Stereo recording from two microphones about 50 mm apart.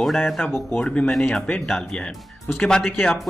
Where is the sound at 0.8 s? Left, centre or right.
Left.